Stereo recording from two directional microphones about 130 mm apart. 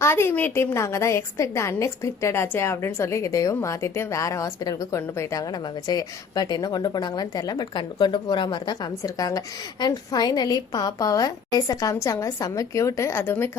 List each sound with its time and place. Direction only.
0.0 s a woman's voice: 20° left (ahead or behind)